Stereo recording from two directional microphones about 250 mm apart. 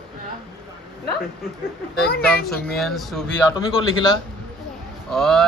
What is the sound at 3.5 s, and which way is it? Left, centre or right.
Speech, centre.